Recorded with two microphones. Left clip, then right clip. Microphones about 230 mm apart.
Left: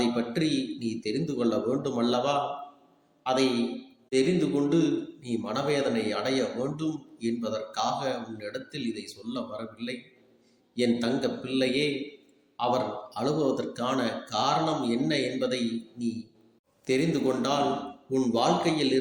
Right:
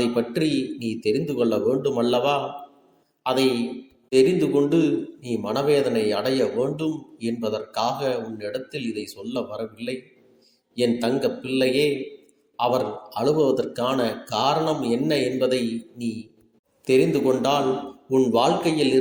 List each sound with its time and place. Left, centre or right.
0.0 s a man's voice: centre